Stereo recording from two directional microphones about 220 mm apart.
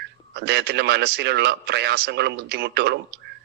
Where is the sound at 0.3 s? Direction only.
50° right (ahead or behind).